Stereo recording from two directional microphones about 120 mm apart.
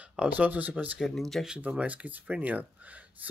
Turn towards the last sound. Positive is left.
turn(degrees=-10)  # may be behind; listen again after turning